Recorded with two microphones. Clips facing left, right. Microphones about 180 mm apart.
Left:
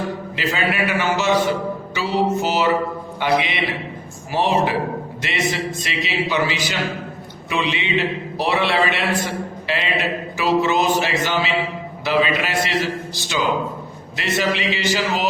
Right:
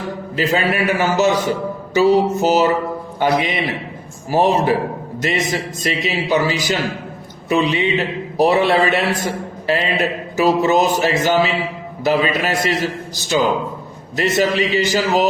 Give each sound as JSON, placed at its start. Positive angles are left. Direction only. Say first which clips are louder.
{"t": 0.3, "sound": "a man's voice", "louder": "right 5 dB", "side_deg": -40}